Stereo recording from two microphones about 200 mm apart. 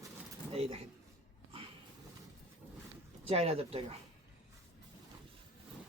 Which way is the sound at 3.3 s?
30° right (ahead or behind).